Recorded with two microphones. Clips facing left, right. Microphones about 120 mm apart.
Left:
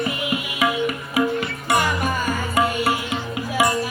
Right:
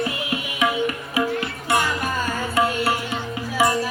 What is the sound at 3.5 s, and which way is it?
Music, 15° left (ahead or behind).